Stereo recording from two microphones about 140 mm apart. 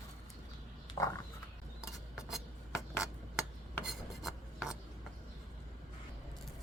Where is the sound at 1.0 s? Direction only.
20° left (ahead or behind).